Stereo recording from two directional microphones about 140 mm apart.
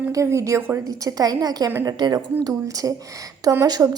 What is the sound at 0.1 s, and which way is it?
A woman's voice, 20° right (ahead or behind).